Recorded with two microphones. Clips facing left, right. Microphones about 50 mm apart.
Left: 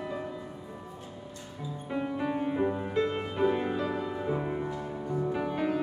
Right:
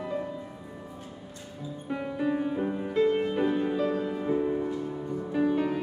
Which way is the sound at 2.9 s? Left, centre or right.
Centre.